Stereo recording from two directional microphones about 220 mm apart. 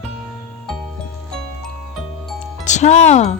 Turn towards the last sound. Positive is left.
turn(degrees=30)  # may be behind; listen again after turning